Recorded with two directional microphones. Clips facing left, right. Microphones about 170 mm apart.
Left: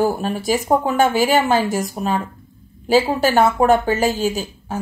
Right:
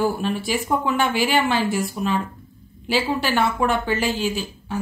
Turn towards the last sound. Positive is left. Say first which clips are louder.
# left 2 dB
turn(degrees=45)  # may be behind; listen again after turning